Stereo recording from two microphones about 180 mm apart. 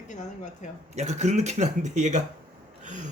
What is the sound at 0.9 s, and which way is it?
Speech, 40° right (ahead or behind).